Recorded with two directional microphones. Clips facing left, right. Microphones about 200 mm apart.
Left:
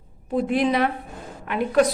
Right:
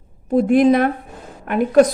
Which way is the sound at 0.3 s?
45° right (ahead or behind).